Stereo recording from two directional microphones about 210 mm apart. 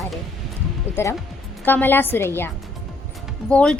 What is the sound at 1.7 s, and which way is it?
A woman's voice, 10° left (ahead or behind).